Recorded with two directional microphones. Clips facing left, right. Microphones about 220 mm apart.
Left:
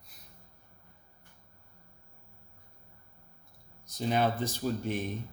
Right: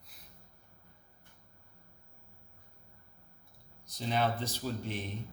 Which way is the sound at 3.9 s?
45° left (ahead or behind).